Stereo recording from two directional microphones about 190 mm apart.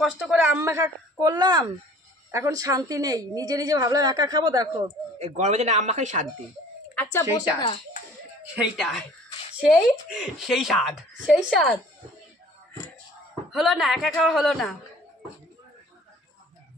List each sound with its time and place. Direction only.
0.0 s a woman's voice: 5° right (ahead or behind); by 4.9 s 20° right (ahead or behind)
5.2 s speech: 35° right (ahead or behind)
7.0 s speech: 10° left (ahead or behind)
7.3 s a child's voice: 30° left (ahead or behind)
8.5 s speech: centre (ahead or behind)
10.0 s speech: 5° right (ahead or behind)
13.3 s speech: centre (ahead or behind)